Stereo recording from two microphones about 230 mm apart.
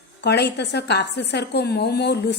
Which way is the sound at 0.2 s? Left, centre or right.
Left.